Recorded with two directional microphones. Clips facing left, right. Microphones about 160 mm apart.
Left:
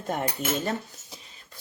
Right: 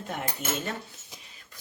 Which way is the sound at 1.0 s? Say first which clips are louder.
Left 3 dB; 40° left (ahead or behind).